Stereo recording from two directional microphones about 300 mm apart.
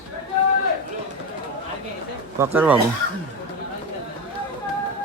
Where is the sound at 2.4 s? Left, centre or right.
Centre.